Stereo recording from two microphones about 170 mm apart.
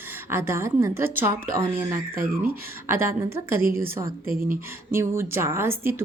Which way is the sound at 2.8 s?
15° right (ahead or behind).